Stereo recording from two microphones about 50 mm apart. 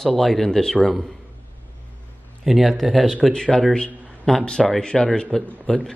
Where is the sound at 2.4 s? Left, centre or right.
Centre.